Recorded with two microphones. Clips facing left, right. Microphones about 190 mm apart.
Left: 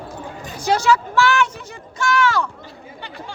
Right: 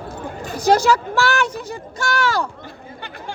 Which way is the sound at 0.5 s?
40° right (ahead or behind).